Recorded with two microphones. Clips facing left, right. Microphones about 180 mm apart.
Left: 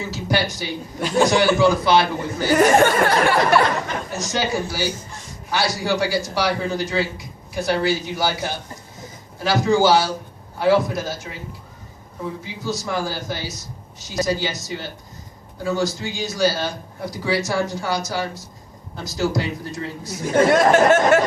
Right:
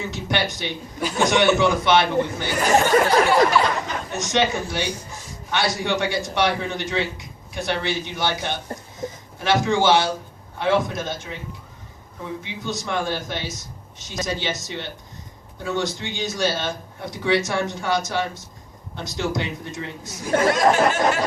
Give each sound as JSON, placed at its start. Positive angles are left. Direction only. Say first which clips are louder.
{"t": 0.1, "sound": "a man's voice", "louder": "left 2 dB", "side_deg": 0}
{"t": 2.6, "sound": "speech", "louder": "left 2 dB", "side_deg": 55}
{"t": 4.1, "sound": "a man's voice", "louder": "right 2 dB", "side_deg": 0}
{"t": 12.4, "sound": "a man's voice", "louder": "left 2 dB", "side_deg": 0}
{"t": 20.5, "sound": "speech", "louder": "left 4 dB", "side_deg": 50}